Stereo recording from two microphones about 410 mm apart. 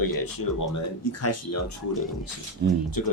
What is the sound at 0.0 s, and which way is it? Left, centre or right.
Speech, left.